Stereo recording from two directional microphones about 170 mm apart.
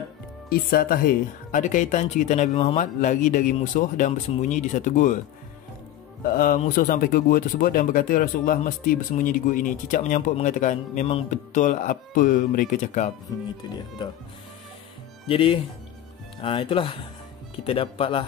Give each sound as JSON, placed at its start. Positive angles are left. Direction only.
{"t": 0.5, "sound": "speech", "side_deg": 60}
{"t": 6.2, "sound": "speech", "side_deg": 55}
{"t": 15.2, "sound": "speech", "side_deg": 30}